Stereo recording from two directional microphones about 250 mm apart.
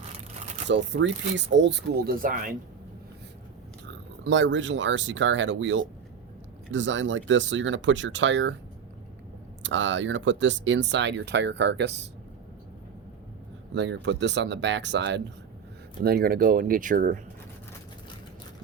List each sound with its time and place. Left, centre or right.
0.7 s speech: right
3.8 s speech: right
9.6 s speech: right
13.7 s speech: right